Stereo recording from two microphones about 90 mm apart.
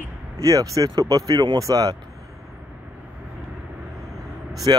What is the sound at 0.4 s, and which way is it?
Speech, 40° right (ahead or behind).